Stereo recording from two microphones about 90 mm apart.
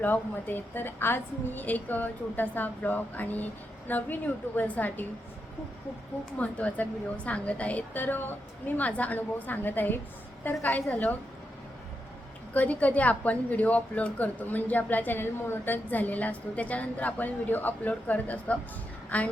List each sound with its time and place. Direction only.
0.0 s a woman's voice: 20° left (ahead or behind)
6.3 s a woman's voice: 15° left (ahead or behind)
12.5 s a woman's voice: 15° left (ahead or behind)